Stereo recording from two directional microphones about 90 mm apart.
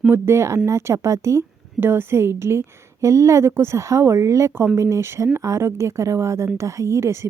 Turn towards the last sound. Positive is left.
turn(degrees=-30)  # may be behind; listen again after turning